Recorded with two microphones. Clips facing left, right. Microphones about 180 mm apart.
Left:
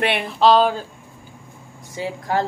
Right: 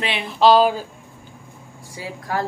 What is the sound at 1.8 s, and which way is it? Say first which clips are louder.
Speech: left 6 dB; 25° left (ahead or behind).